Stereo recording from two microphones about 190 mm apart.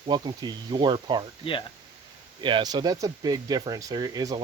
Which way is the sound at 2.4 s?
25° right (ahead or behind).